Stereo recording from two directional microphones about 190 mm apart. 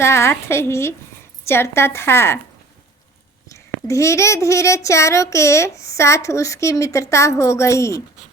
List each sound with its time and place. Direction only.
0.0 s a child's voice: 15° left (ahead or behind)
3.5 s a child's voice: 15° left (ahead or behind)